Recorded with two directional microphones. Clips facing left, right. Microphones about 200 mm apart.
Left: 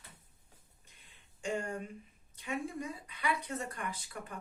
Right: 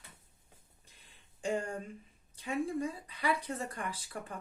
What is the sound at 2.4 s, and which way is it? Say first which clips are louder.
Speech: right 4 dB; 30° right (ahead or behind).